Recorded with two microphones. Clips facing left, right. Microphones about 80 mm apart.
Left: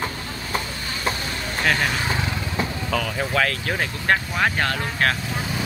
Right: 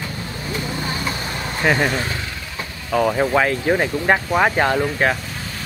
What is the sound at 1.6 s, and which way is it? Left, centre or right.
Speech, centre.